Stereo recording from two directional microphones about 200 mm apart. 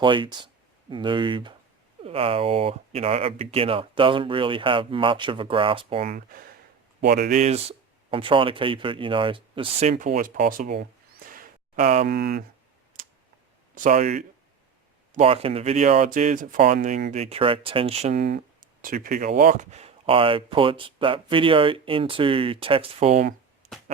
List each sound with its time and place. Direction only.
0.0 s speech: 25° right (ahead or behind)
6.1 s speech: 45° right (ahead or behind); by 9.9 s 25° right (ahead or behind)
10.1 s a sound: 40° right (ahead or behind)
12.0 s speech: 50° right (ahead or behind)
13.7 s speech: 40° right (ahead or behind)
18.8 s speech: 45° right (ahead or behind)